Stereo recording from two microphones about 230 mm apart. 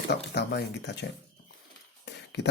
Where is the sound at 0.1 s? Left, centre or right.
Left.